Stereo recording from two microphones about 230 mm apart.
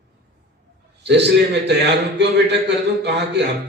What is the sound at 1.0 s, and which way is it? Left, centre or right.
A man's voice, right.